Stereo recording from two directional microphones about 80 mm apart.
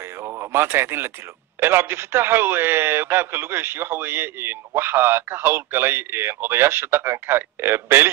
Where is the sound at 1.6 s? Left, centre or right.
Right.